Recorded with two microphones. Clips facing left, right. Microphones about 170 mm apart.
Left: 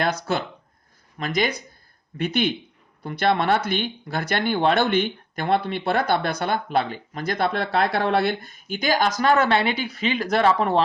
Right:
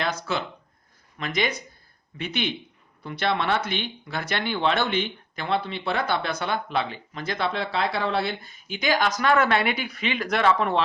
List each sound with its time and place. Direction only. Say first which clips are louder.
0.0 s a woman's voice: left 4 dB; 45° left (ahead or behind)
8.4 s a woman's voice: left 4 dB; 45° left (ahead or behind)